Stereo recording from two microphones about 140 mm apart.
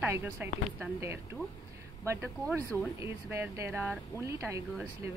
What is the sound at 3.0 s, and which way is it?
Speech, 20° right (ahead or behind).